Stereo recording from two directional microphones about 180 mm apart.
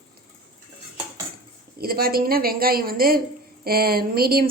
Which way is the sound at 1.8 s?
55° right (ahead or behind).